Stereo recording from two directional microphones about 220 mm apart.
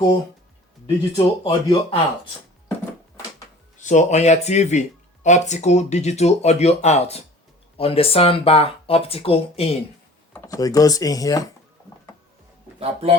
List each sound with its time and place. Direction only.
1.2 s speech: 25° left (ahead or behind)
3.8 s speech: 35° left (ahead or behind)
10.3 s speech: 15° left (ahead or behind)
12.8 s speech: 25° right (ahead or behind)